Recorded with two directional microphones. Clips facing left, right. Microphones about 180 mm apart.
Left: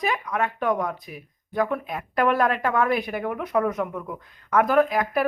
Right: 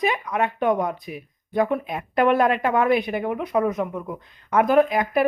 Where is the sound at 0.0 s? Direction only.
20° right (ahead or behind).